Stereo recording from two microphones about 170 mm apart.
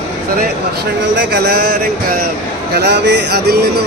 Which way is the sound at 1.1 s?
75° right (ahead or behind).